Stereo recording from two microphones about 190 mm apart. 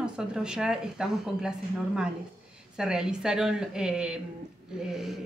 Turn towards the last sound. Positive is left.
turn(degrees=-5)  # may be behind; listen again after turning